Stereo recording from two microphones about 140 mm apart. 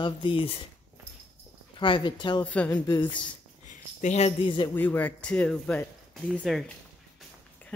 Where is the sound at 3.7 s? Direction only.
55° left (ahead or behind).